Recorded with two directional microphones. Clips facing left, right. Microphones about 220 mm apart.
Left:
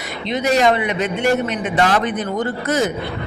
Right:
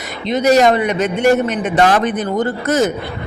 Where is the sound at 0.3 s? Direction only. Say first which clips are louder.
Right 4 dB; 45° right (ahead or behind).